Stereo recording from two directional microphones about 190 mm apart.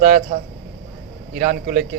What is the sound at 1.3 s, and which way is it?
Speech, 50° right (ahead or behind).